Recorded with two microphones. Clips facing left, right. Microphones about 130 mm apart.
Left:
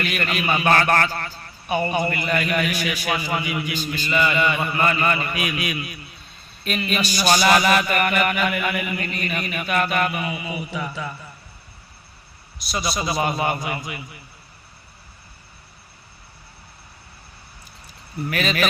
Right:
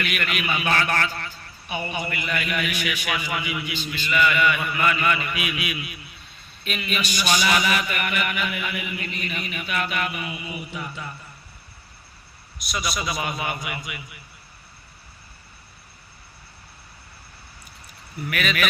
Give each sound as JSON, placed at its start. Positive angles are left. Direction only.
{"t": 0.0, "sound": "a man's voice", "side_deg": 35}
{"t": 12.5, "sound": "a man's voice", "side_deg": 30}
{"t": 18.3, "sound": "a man's voice", "side_deg": 30}